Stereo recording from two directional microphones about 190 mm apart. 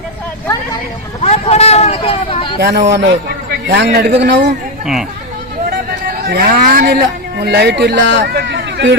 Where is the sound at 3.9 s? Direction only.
65° right (ahead or behind).